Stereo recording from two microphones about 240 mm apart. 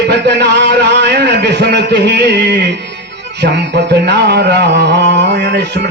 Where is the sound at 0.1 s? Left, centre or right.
Right.